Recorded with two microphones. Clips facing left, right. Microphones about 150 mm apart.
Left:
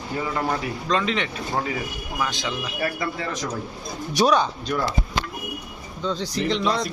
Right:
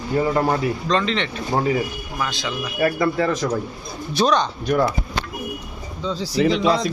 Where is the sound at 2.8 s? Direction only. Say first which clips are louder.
Right 11 dB; 45° right (ahead or behind).